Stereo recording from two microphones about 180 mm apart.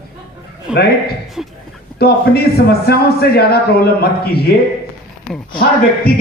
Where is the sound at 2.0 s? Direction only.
60° left (ahead or behind).